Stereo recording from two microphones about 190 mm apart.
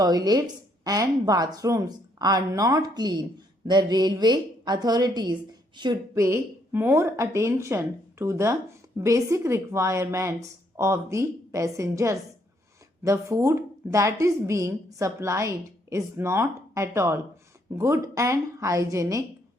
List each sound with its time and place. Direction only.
0.0 s a woman's voice: 20° right (ahead or behind)